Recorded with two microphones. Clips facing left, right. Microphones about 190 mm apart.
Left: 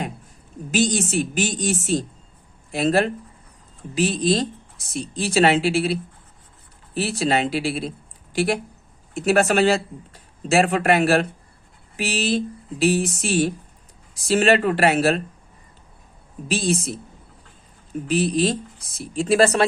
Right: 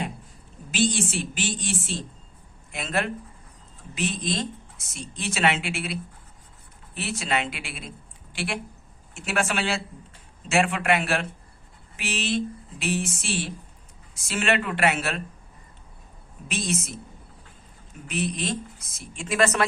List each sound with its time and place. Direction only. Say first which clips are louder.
0.7 s a woman's voice: left 4 dB; 40° left (ahead or behind)
16.5 s speech: left 6 dB; 35° left (ahead or behind)
18.1 s speech: left 8 dB; 35° left (ahead or behind)